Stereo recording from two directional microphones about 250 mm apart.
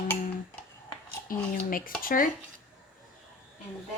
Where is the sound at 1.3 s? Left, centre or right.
Left.